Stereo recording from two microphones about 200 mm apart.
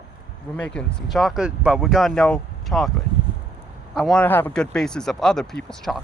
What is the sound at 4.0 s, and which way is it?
Speech, 5° left (ahead or behind).